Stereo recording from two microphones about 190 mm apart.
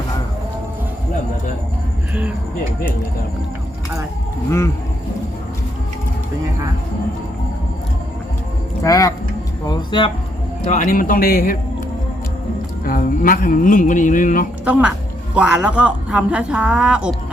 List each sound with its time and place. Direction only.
8.8 s speech: 15° left (ahead or behind)
9.6 s a sound: 25° left (ahead or behind)
10.7 s a man's voice: 45° left (ahead or behind)
12.8 s music: 45° left (ahead or behind)
14.6 s speech: 5° right (ahead or behind)